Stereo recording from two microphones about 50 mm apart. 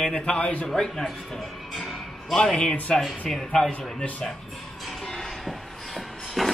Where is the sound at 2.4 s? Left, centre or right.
Centre.